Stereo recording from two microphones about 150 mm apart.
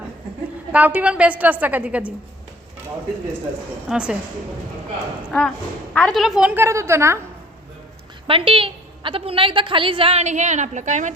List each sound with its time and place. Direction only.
0.7 s a woman's voice: 10° right (ahead or behind)
3.8 s a woman's voice: 5° right (ahead or behind)
5.3 s a woman's voice: 5° left (ahead or behind); by 7.2 s 15° right (ahead or behind)
8.3 s a woman's voice: 35° right (ahead or behind); by 11.1 s 55° right (ahead or behind)